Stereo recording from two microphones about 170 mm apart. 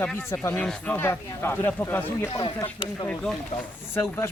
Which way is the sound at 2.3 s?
30° left (ahead or behind).